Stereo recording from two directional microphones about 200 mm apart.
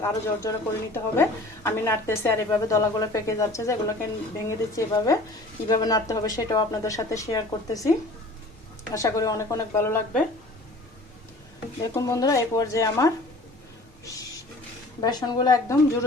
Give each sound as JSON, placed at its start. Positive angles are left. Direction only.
{"t": 0.0, "sound": "a woman's voice", "side_deg": 15}
{"t": 11.8, "sound": "a woman's voice", "side_deg": 20}
{"t": 15.0, "sound": "a woman's voice", "side_deg": 20}